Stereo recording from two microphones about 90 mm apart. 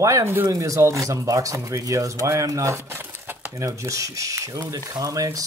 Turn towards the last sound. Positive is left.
turn(degrees=-40)  # may be behind; listen again after turning